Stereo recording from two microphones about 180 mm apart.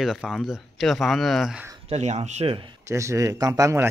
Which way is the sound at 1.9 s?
35° right (ahead or behind).